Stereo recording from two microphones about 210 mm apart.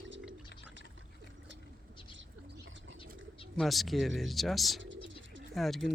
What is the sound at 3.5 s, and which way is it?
Speech, centre (ahead or behind).